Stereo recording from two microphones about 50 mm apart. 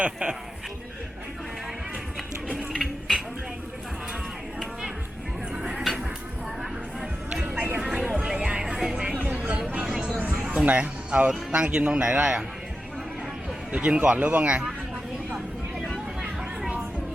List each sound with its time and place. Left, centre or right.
0.0 s speech: right
5.8 s music: centre
7.4 s music: right
7.8 s music: centre
8.5 s music: centre
9.1 s music: right
10.4 s music: centre
11.3 s speech: centre
13.7 s speech: right